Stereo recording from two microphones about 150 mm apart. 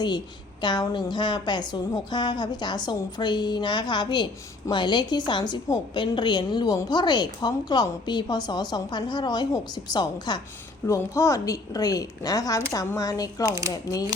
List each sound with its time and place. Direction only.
0.6 s a woman's voice: 30° left (ahead or behind)